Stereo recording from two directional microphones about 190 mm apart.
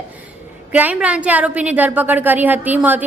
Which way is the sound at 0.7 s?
10° right (ahead or behind).